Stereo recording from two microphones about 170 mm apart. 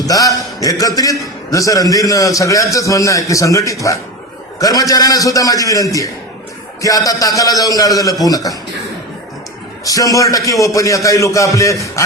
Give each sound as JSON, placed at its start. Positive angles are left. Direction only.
{"t": 0.0, "sound": "a man's voice", "side_deg": 20}
{"t": 9.8, "sound": "a man's voice", "side_deg": 20}